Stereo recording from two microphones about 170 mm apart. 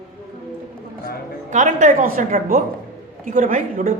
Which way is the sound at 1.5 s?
45° right (ahead or behind).